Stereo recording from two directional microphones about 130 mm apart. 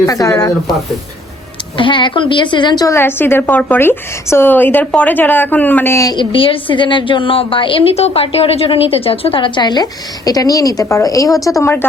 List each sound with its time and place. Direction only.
0.0 s speech: 25° left (ahead or behind)
1.7 s a woman's voice: 40° left (ahead or behind)
2.9 s a woman's voice: 15° left (ahead or behind)
6.1 s a woman's voice: 45° left (ahead or behind); by 11.9 s 15° left (ahead or behind)